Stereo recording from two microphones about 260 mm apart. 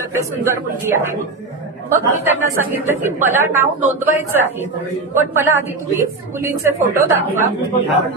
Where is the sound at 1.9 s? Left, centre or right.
Centre.